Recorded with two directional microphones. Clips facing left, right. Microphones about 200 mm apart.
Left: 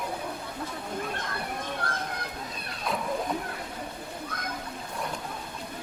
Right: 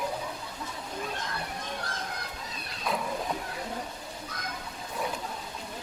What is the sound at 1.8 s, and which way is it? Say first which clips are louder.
Music: left 5 dB; 55° left (ahead or behind).